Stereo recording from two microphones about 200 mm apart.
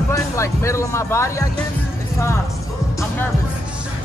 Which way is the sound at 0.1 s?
15° left (ahead or behind).